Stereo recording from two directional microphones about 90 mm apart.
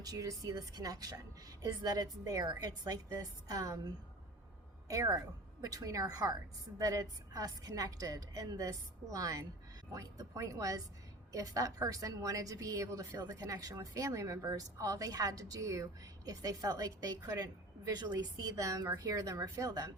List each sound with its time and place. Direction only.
0.0 s a woman's voice: 40° right (ahead or behind)